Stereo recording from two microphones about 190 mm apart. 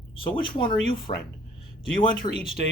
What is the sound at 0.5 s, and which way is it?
Speech, 25° left (ahead or behind).